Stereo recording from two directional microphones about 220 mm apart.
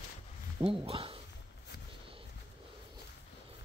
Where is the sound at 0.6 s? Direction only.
25° right (ahead or behind).